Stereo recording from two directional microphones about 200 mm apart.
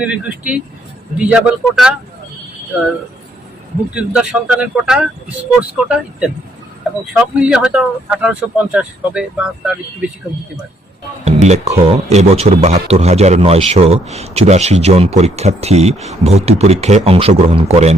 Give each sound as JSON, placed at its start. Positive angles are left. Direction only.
{"t": 0.0, "sound": "speech", "side_deg": -5}
{"t": 3.9, "sound": "speech", "side_deg": -5}
{"t": 11.4, "sound": "speech", "side_deg": -35}